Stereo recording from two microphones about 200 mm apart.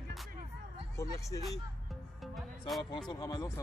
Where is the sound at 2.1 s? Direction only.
Centre (ahead or behind).